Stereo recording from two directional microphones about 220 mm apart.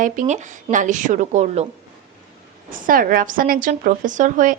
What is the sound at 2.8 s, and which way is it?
Speech, 40° right (ahead or behind).